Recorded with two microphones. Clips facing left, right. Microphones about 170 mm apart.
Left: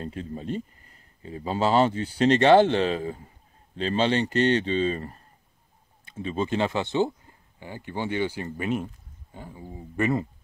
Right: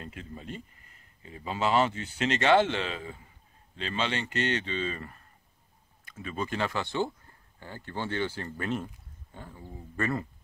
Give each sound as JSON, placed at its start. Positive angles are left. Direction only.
{"t": 0.0, "sound": "speech", "side_deg": 35}